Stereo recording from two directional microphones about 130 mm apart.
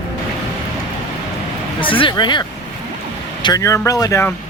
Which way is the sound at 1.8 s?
40° left (ahead or behind).